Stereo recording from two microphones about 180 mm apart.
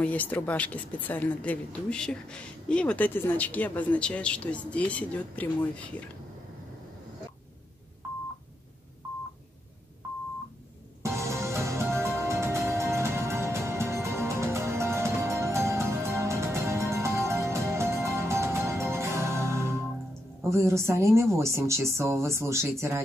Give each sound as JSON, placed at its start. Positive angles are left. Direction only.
{"t": 0.0, "sound": "speech", "side_deg": 10}
{"t": 11.0, "sound": "music", "side_deg": -15}
{"t": 20.4, "sound": "speech", "side_deg": -15}